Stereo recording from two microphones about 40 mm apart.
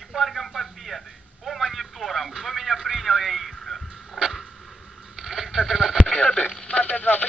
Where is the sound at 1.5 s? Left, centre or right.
Centre.